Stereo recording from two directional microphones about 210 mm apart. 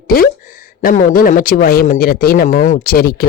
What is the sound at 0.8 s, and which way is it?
Speech, 40° left (ahead or behind).